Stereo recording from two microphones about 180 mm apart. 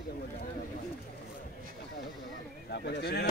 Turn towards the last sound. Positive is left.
turn(degrees=70)  # may be behind; listen again after turning